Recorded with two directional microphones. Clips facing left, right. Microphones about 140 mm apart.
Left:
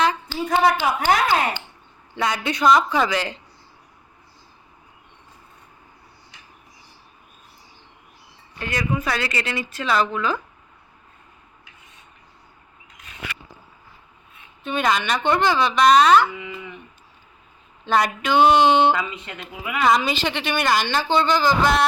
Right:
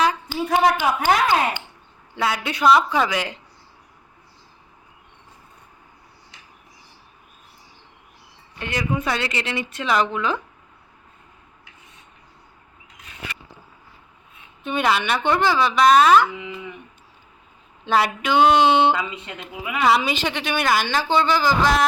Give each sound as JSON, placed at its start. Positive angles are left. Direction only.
{"t": 0.0, "sound": "a sound", "side_deg": -10}
{"t": 1.0, "sound": "a woman's voice", "side_deg": -15}
{"t": 2.1, "sound": "a woman's voice", "side_deg": -5}
{"t": 8.5, "sound": "speech", "side_deg": -20}
{"t": 14.6, "sound": "a woman's voice", "side_deg": -10}
{"t": 16.3, "sound": "speech", "side_deg": -20}
{"t": 17.8, "sound": "a woman's voice", "side_deg": -10}
{"t": 18.4, "sound": "a sound", "side_deg": 15}
{"t": 18.9, "sound": "a woman's voice", "side_deg": -15}